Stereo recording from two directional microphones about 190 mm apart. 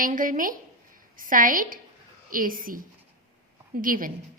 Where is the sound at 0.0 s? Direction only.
45° right (ahead or behind).